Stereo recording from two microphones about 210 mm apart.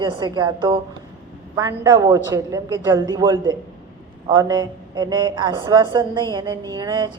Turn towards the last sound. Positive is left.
turn(degrees=-20)  # may be behind; listen again after turning